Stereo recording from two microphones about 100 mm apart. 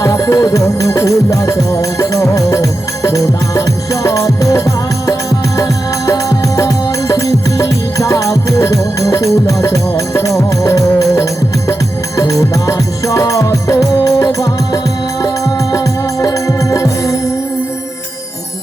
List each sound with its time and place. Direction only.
0.0 s music: 35° left (ahead or behind)
6.6 s music: 35° left (ahead or behind)
16.2 s music: 35° left (ahead or behind)